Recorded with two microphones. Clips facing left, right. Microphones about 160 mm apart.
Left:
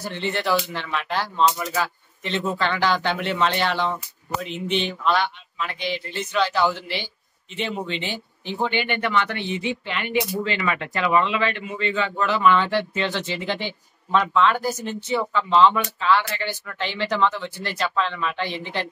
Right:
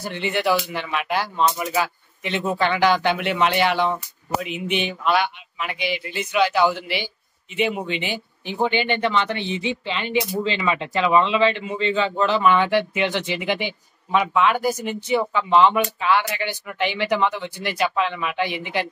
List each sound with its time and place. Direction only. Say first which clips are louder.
0.0 s speech: right 3 dB; 10° right (ahead or behind)
12.4 s speech: left 1 dB; 15° right (ahead or behind)